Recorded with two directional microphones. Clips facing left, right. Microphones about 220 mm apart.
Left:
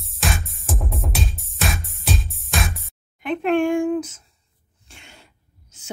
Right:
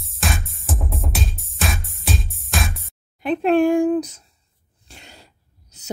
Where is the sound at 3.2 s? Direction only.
35° right (ahead or behind).